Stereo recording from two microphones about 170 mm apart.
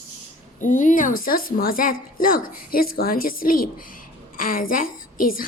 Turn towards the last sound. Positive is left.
turn(degrees=55)  # may be behind; listen again after turning